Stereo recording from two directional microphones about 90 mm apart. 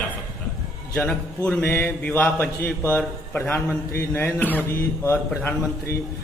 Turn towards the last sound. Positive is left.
turn(degrees=25)  # may be behind; listen again after turning